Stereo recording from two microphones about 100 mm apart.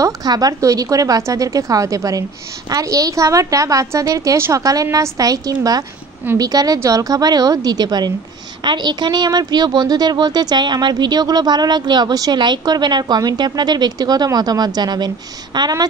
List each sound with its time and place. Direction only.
0.0 s speech: 40° right (ahead or behind)